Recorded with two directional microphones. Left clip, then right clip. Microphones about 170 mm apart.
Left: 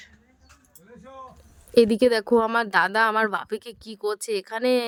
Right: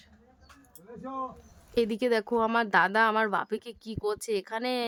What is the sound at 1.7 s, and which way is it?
Speech, 30° left (ahead or behind).